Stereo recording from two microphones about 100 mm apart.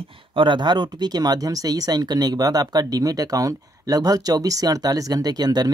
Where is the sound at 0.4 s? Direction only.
50° right (ahead or behind).